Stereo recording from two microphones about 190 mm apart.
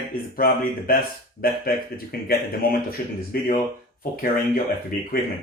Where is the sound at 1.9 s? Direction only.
50° left (ahead or behind).